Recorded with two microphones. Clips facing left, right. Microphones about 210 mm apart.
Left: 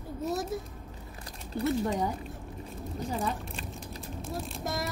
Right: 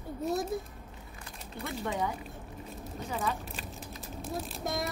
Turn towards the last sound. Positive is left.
turn(degrees=0)  # may be behind; listen again after turning